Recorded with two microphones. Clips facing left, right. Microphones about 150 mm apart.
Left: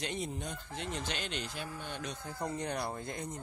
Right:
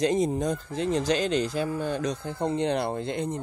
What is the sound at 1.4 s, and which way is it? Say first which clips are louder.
Speech: right 14 dB; 90° right.